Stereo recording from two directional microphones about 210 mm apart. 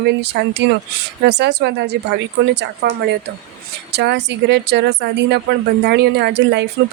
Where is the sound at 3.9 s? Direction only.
55° right (ahead or behind).